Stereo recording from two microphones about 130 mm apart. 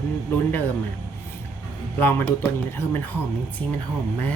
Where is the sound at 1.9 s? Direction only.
15° left (ahead or behind).